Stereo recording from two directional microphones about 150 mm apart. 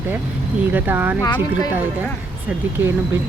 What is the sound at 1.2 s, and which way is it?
Speech, 25° left (ahead or behind).